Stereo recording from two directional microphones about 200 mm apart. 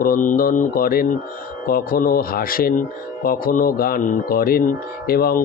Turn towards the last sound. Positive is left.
turn(degrees=50)  # may be behind; listen again after turning